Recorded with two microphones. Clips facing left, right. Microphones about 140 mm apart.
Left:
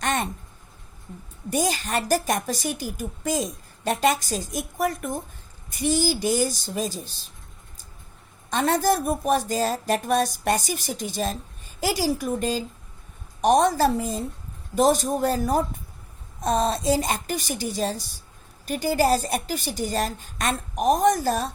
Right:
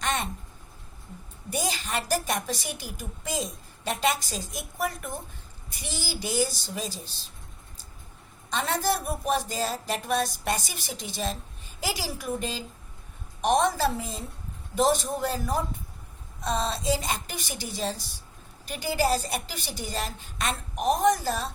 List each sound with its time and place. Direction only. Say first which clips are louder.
0.0 s a sound: left 4 dB; 50° left (ahead or behind)
1.5 s a woman's voice: left 6 dB; 45° left (ahead or behind)
8.4 s a woman's voice: left 6 dB; 45° left (ahead or behind)